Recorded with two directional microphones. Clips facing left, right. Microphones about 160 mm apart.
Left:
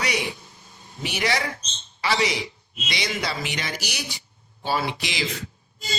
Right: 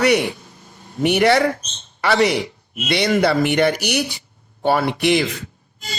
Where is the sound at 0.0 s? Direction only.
60° right (ahead or behind).